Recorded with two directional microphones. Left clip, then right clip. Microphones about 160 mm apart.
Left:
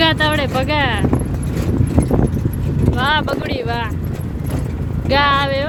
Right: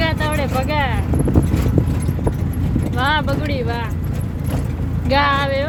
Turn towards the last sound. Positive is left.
turn(degrees=10)  # may be behind; listen again after turning